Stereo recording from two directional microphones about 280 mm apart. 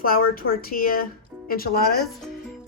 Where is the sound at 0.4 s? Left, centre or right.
Left.